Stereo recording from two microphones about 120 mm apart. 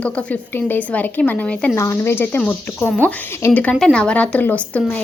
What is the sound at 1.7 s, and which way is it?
A woman's voice, 25° left (ahead or behind).